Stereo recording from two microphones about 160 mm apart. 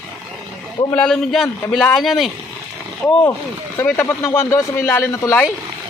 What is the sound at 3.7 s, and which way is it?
Speech, 15° left (ahead or behind).